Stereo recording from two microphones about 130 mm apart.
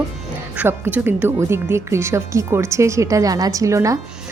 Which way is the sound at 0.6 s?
15° right (ahead or behind).